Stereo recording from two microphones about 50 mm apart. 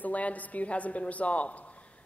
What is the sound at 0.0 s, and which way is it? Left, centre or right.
A woman's voice, left.